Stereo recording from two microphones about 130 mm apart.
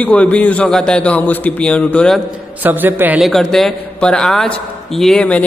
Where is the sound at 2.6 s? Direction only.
15° right (ahead or behind).